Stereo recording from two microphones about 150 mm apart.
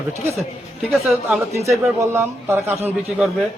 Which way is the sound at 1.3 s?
20° right (ahead or behind).